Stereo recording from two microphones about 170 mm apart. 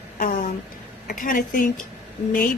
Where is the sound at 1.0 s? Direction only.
55° left (ahead or behind).